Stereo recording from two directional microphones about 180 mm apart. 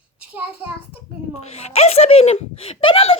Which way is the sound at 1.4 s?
35° left (ahead or behind).